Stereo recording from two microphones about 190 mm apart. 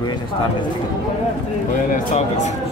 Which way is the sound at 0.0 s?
20° left (ahead or behind).